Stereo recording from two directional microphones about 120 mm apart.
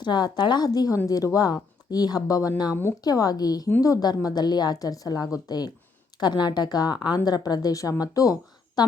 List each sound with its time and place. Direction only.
0.0 s speech: 40° left (ahead or behind)